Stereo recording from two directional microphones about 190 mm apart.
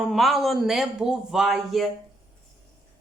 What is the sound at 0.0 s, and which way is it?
A man's voice, centre (ahead or behind).